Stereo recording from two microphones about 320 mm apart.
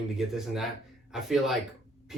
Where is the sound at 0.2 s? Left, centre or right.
Centre.